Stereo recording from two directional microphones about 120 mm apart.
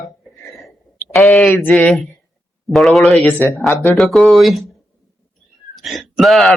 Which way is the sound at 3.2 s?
15° left (ahead or behind).